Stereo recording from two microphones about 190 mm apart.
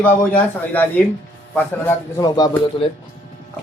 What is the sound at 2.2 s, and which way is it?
Speech, 20° left (ahead or behind).